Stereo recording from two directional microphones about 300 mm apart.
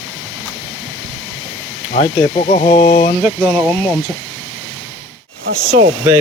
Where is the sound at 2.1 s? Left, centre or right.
Left.